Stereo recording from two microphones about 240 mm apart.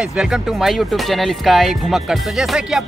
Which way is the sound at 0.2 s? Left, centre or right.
Centre.